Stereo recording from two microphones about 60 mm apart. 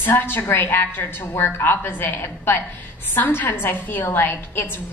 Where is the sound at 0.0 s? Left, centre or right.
Left.